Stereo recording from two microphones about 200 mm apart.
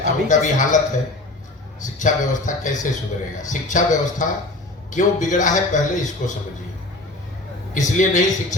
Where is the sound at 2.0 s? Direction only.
40° left (ahead or behind).